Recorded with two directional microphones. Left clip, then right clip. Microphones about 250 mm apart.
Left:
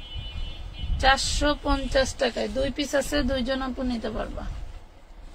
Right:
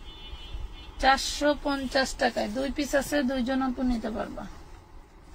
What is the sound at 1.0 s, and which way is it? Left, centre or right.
Speech, centre.